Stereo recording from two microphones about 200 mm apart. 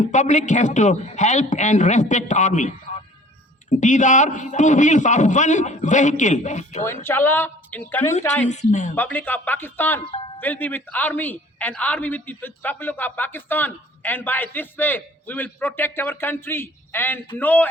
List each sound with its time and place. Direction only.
0.0 s a man's voice: 35° left (ahead or behind)
6.8 s a man's voice: 10° left (ahead or behind)
8.4 s a man's voice: 35° left (ahead or behind)
9.0 s a man's voice: 10° left (ahead or behind)